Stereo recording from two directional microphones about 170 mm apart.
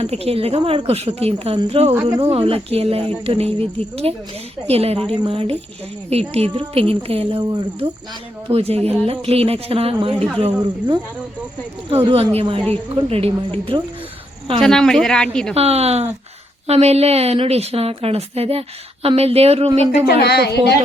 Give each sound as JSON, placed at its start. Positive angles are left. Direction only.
{"t": 0.0, "sound": "a woman's voice", "side_deg": -35}
{"t": 2.0, "sound": "speech", "side_deg": -20}
{"t": 2.3, "sound": "a woman's voice", "side_deg": -35}
{"t": 14.6, "sound": "speech", "side_deg": 5}
{"t": 15.5, "sound": "a woman's voice", "side_deg": -35}
{"t": 20.1, "sound": "speech", "side_deg": 70}